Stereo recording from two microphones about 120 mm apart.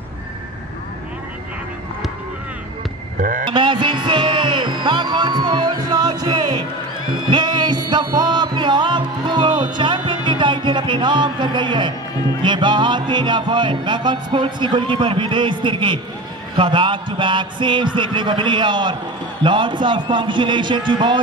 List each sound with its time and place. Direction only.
3.4 s music: 40° right (ahead or behind)